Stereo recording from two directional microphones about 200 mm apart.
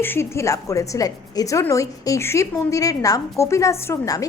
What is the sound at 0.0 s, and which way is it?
A woman's voice, 10° left (ahead or behind).